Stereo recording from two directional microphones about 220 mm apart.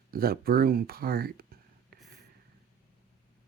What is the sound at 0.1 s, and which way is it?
Speech, 45° right (ahead or behind).